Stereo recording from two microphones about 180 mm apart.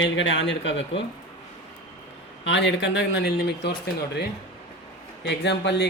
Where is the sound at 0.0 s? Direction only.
90° left.